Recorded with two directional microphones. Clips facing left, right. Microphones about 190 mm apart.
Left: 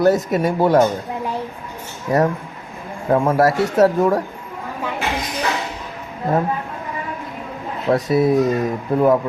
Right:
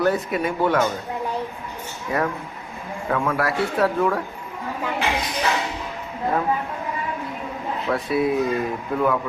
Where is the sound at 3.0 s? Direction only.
30° left (ahead or behind).